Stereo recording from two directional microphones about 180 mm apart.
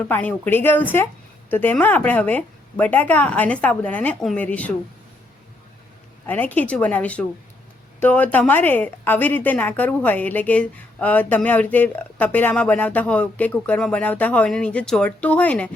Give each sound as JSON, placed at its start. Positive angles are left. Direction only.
{"t": 0.1, "sound": "a woman's voice", "side_deg": 10}
{"t": 6.2, "sound": "a woman's voice", "side_deg": 10}